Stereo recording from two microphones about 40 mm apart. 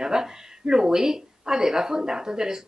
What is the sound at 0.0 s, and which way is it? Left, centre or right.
Speech, centre.